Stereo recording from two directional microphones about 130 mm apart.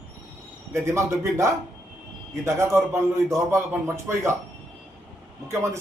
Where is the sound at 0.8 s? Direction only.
20° right (ahead or behind).